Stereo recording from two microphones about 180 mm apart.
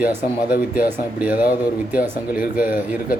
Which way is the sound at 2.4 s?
50° left (ahead or behind).